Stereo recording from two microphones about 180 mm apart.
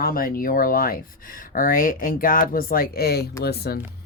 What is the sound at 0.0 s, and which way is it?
Speech, 55° left (ahead or behind).